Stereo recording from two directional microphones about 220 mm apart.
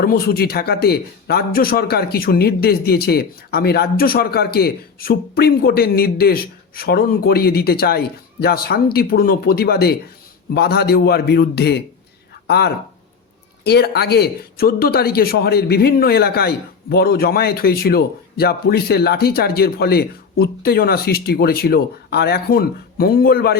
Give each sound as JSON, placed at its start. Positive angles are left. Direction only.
{"t": 0.0, "sound": "speech", "side_deg": 45}